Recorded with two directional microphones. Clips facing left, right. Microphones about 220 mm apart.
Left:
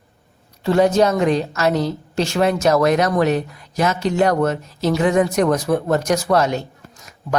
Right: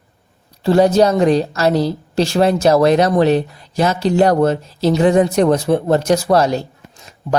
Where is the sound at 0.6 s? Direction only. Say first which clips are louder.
Right 3 dB; 35° right (ahead or behind).